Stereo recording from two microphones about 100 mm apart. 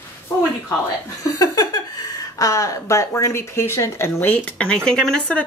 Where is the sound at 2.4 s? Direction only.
35° left (ahead or behind).